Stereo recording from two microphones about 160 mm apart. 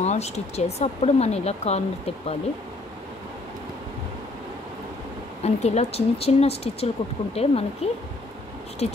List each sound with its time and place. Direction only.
0.0 s speech: 45° left (ahead or behind)
5.4 s speech: 45° left (ahead or behind)